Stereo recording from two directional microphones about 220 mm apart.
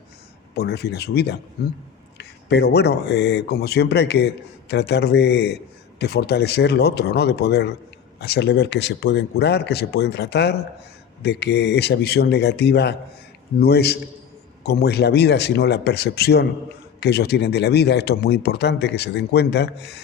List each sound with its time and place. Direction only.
0.5 s speech: 45° left (ahead or behind)